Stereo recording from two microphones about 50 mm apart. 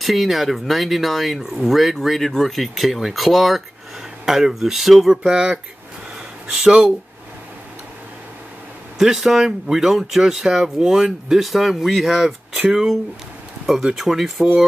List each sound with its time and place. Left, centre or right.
0.0 s speech: centre
5.2 s speech: centre
8.9 s speech: centre
13.9 s speech: centre